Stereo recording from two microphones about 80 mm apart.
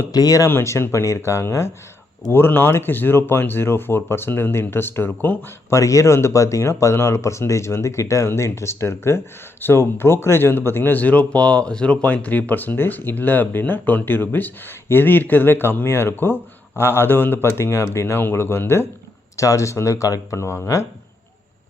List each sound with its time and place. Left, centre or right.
0.1 s speech: left
0.4 s speech: left
5.7 s speech: left
19.4 s speech: left